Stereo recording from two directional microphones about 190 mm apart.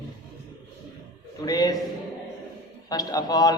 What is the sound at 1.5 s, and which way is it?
Speech, 20° left (ahead or behind).